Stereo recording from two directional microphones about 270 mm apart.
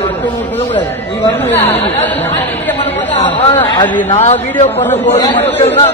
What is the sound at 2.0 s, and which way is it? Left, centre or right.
Speech, centre.